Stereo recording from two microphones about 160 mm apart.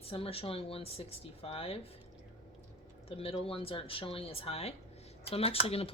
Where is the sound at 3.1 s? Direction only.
35° left (ahead or behind).